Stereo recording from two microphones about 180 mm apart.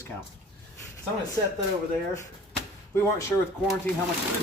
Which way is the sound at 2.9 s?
15° left (ahead or behind).